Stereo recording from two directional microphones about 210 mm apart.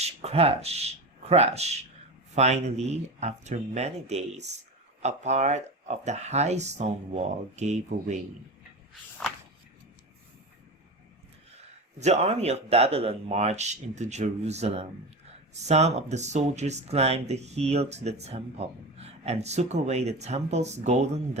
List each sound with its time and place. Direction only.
0.0 s a sound: 30° right (ahead or behind)
2.3 s speech: 30° right (ahead or behind)
11.9 s speech: 30° right (ahead or behind)